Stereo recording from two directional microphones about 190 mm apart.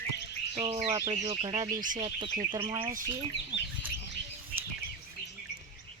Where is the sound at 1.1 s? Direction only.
30° right (ahead or behind).